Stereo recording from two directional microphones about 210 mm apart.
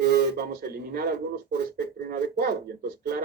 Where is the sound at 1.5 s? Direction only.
50° right (ahead or behind).